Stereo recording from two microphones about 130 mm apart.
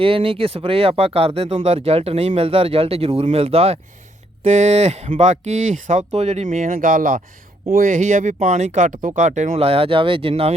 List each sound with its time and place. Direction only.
0.0 s speech: 45° right (ahead or behind); by 7.2 s 90° right
7.8 s speech: 80° right; by 10.5 s 45° right (ahead or behind)